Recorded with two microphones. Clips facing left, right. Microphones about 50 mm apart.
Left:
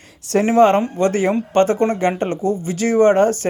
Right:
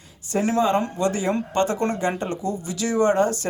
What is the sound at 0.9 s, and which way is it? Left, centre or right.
Speech, left.